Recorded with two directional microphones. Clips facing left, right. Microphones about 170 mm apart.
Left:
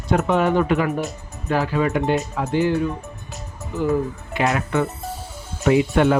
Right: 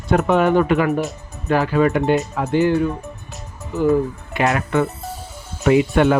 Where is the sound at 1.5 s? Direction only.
55° right (ahead or behind).